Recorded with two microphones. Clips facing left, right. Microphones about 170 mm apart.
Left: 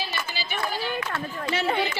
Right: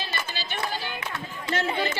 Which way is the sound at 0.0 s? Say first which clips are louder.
Left 1 dB; 10° left (ahead or behind).